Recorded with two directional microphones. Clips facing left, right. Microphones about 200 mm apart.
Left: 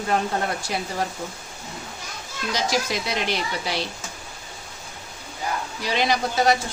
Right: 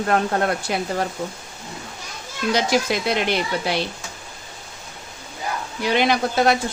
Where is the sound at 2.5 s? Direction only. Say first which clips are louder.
Right 5 dB; 60° right (ahead or behind).